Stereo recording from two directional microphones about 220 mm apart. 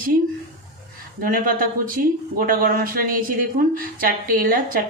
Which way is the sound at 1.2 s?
40° right (ahead or behind).